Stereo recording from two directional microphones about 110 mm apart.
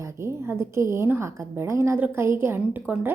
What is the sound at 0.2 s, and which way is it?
A woman's voice, 25° right (ahead or behind).